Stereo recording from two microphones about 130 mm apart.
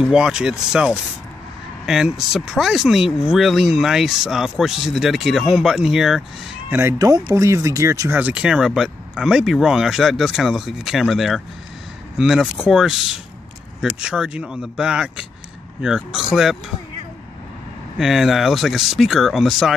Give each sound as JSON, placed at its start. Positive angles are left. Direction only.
{"t": 0.0, "sound": "speech", "side_deg": -5}
{"t": 6.7, "sound": "speech", "side_deg": -20}
{"t": 8.2, "sound": "speech", "side_deg": -10}
{"t": 17.9, "sound": "speech", "side_deg": -5}